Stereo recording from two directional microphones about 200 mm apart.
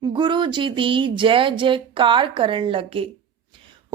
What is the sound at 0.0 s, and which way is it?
Speech, 25° right (ahead or behind).